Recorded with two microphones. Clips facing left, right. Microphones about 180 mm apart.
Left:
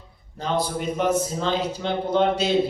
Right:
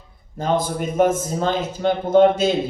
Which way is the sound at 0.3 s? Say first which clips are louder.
Right 4 dB; 50° right (ahead or behind).